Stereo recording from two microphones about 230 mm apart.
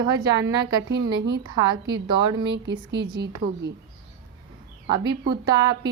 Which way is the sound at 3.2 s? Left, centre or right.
Right.